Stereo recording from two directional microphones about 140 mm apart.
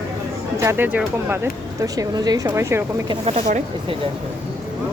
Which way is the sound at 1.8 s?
25° right (ahead or behind).